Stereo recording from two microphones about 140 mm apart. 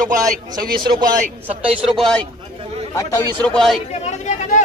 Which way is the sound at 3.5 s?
Centre (ahead or behind).